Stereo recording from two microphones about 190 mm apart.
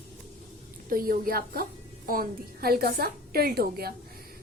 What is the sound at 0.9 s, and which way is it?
A woman's voice, 50° right (ahead or behind).